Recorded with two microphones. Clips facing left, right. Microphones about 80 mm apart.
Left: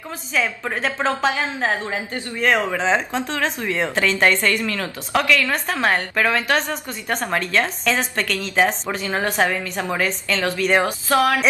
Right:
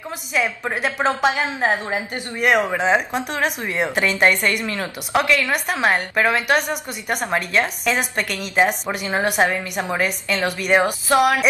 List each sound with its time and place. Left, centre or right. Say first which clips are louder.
0.3 s a woman's voice: right 1 dB; centre